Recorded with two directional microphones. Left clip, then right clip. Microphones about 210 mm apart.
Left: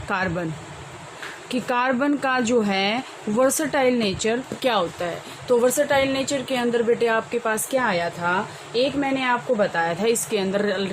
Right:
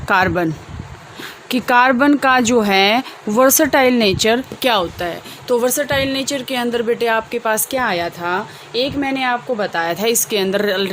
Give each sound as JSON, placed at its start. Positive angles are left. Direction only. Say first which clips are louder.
{"t": 0.1, "sound": "speech", "louder": "right 10 dB", "side_deg": -50}
{"t": 1.5, "sound": "speech", "louder": "right 9 dB", "side_deg": -50}